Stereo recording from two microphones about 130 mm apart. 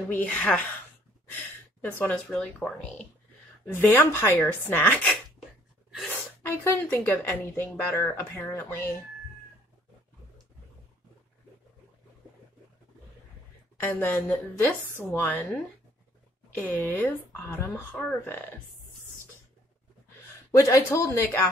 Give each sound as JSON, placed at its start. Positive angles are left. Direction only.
{"t": 0.1, "sound": "speech", "side_deg": 10}
{"t": 13.7, "sound": "speech", "side_deg": 15}
{"t": 16.5, "sound": "speech", "side_deg": 15}
{"t": 20.5, "sound": "speech", "side_deg": 20}